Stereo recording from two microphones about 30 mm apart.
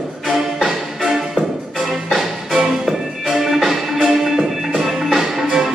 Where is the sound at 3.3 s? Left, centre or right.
Centre.